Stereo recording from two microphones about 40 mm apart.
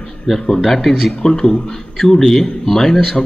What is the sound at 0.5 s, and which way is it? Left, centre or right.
Speech, centre.